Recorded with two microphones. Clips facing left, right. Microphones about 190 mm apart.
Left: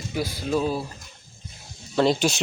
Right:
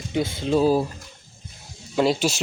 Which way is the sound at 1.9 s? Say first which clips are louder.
Even; 5° right (ahead or behind).